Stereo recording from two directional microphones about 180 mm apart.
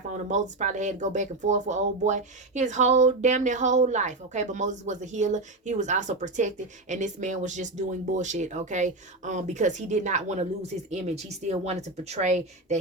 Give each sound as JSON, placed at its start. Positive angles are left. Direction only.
{"t": 0.1, "sound": "speech", "side_deg": -40}